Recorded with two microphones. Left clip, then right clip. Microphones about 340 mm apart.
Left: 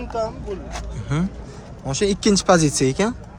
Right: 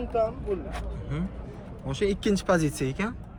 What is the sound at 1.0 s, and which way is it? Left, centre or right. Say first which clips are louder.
Speech: left 9 dB; centre.